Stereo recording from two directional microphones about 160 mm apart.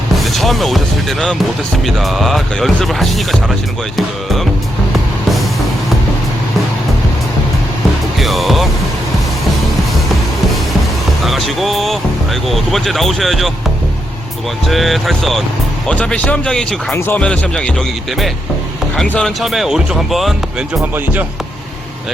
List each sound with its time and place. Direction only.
0.3 s speech: centre (ahead or behind)
2.0 s speech: centre (ahead or behind)
8.2 s music: centre (ahead or behind)
11.3 s speech: centre (ahead or behind)
14.7 s speech: centre (ahead or behind)
20.9 s speech: 10° right (ahead or behind)